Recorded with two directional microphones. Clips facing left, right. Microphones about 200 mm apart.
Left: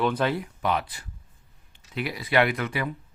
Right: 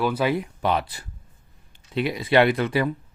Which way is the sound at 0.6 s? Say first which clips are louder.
Right 2 dB; 30° right (ahead or behind).